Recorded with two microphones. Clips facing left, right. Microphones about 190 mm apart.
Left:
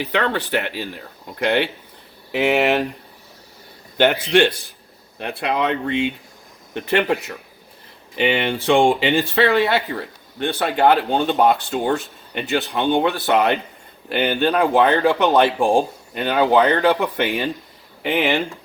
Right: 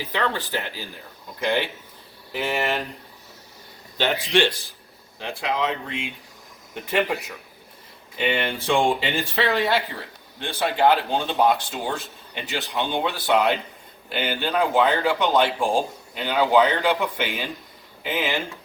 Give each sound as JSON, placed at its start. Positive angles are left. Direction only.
{"t": 0.0, "sound": "speech", "side_deg": 70}
{"t": 3.9, "sound": "speech", "side_deg": 55}